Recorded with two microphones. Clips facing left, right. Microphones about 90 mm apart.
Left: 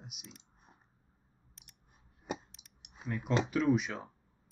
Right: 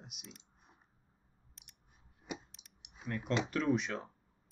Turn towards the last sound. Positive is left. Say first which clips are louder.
# left 3 dB
turn(degrees=5)  # may be behind; listen again after turning